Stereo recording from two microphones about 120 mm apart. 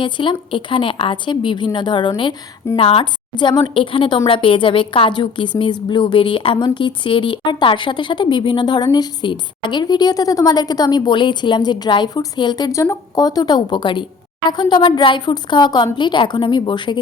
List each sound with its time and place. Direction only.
0.0 s a woman's voice: 45° left (ahead or behind)